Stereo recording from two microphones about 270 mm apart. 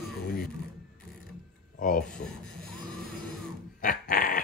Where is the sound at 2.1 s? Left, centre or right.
Centre.